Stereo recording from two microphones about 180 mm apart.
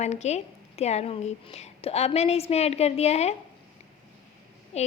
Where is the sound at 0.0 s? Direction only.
40° left (ahead or behind).